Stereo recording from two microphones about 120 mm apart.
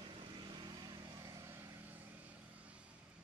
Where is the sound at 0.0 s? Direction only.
40° right (ahead or behind); by 2.8 s 15° right (ahead or behind).